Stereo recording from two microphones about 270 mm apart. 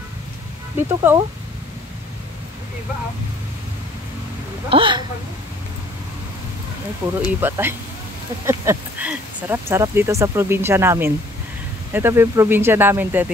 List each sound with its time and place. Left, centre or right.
0.7 s speech: centre
4.6 s speech: centre
7.2 s speech: centre